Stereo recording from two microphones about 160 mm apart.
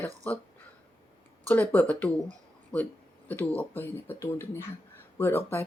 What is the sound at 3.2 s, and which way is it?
Speech, 10° left (ahead or behind).